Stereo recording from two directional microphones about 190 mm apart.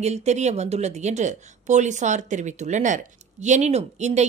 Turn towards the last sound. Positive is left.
turn(degrees=-35)  # may be behind; listen again after turning